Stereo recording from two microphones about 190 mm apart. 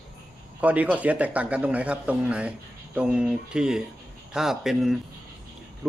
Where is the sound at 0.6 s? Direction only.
5° right (ahead or behind).